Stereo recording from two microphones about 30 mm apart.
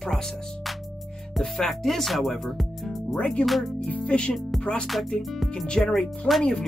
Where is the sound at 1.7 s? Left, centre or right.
Centre.